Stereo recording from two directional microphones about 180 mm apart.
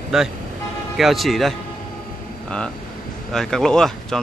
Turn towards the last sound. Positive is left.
turn(degrees=5)  # may be behind; listen again after turning